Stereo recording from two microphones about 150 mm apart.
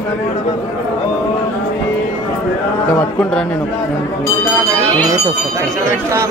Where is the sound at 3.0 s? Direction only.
5° left (ahead or behind).